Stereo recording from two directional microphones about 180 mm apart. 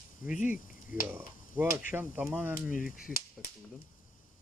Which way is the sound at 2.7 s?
50° left (ahead or behind).